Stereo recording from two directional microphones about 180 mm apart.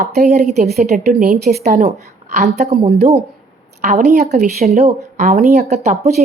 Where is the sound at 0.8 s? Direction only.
40° right (ahead or behind).